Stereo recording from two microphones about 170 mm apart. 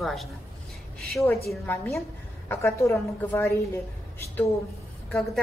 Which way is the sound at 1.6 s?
10° left (ahead or behind).